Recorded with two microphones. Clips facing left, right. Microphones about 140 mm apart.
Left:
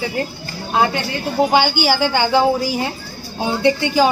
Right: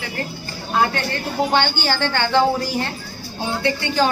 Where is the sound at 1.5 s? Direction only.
5° left (ahead or behind).